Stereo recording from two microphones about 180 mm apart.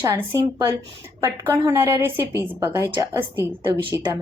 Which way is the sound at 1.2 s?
15° right (ahead or behind).